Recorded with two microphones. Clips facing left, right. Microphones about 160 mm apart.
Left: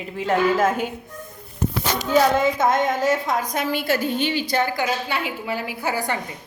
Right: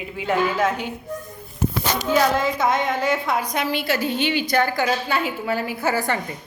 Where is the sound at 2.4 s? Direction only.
50° left (ahead or behind).